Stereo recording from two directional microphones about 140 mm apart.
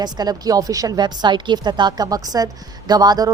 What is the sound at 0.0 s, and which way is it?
A woman's voice, 30° right (ahead or behind).